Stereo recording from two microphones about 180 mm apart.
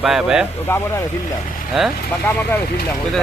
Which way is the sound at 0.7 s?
15° left (ahead or behind).